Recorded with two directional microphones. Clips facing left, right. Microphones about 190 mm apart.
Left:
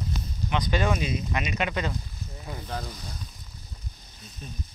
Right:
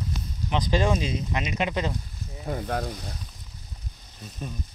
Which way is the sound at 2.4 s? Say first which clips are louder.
Right 7 dB; 55° right (ahead or behind).